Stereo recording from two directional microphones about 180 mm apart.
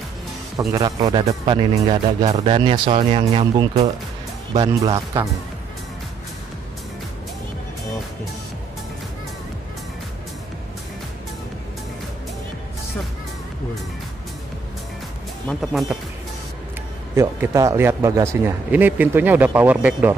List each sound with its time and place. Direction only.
0.7 s speech: 20° right (ahead or behind)
15.4 s speech: centre (ahead or behind)
17.1 s speech: 15° right (ahead or behind)